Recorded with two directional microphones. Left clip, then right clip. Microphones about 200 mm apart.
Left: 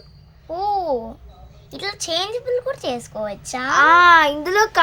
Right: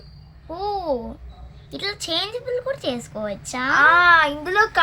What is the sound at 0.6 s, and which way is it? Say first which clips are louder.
Babbling: left 4 dB; 30° left (ahead or behind).